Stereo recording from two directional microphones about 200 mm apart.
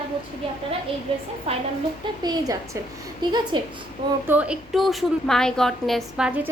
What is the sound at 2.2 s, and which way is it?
A woman's voice, 20° right (ahead or behind).